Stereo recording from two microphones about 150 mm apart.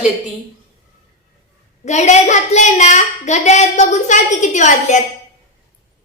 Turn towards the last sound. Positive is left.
turn(degrees=55)  # may be behind; listen again after turning